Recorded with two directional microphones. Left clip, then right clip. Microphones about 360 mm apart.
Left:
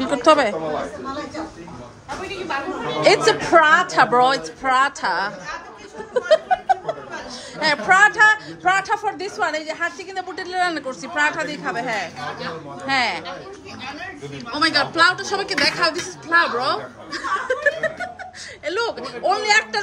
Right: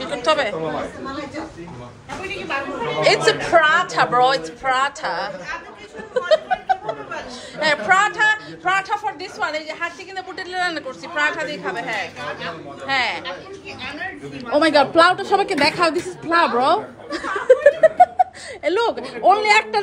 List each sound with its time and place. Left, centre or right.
0.0 s a woman's voice: left
3.0 s speech: centre
6.1 s laughter: centre
7.5 s speech: centre
14.5 s a woman's voice: centre